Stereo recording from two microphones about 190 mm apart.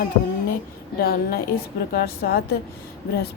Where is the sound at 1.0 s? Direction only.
50° left (ahead or behind).